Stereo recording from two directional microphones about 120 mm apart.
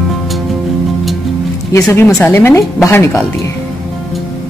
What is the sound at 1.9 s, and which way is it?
A woman's voice, 20° left (ahead or behind).